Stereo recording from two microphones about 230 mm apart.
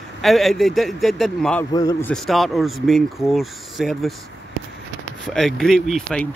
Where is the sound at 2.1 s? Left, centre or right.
Centre.